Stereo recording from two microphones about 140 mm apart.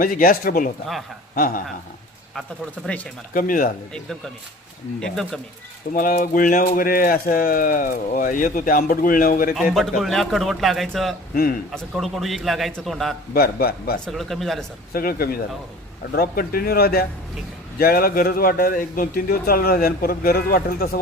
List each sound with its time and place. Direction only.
0.0 s a man's voice: 90° left
2.8 s speech: 10° left (ahead or behind)
3.3 s speech: 80° left
4.9 s a man's voice: 5° left (ahead or behind)
5.9 s speech: 80° left
6.7 s speech: 90° left
10.0 s a man's voice: centre (ahead or behind)
13.3 s a man's voice: 90° left
14.1 s a man's voice: centre (ahead or behind)
14.9 s a man's voice: 90° left